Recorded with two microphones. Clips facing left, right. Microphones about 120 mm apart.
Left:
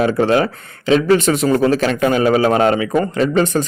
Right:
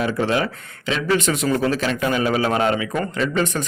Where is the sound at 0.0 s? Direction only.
40° left (ahead or behind).